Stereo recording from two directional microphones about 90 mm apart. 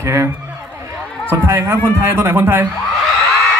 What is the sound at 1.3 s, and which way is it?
A man's voice, 20° right (ahead or behind).